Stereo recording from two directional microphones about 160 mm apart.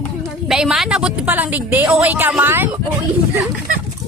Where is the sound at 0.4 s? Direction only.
5° right (ahead or behind).